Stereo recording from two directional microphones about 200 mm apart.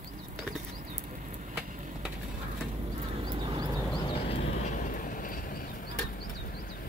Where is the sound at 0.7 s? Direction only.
40° right (ahead or behind).